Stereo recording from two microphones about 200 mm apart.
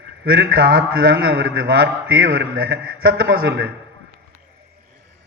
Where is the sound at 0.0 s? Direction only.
55° right (ahead or behind).